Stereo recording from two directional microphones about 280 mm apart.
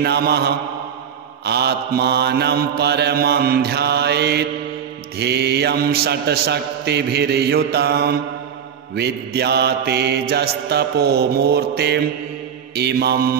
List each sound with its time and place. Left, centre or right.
0.0 s mantra: right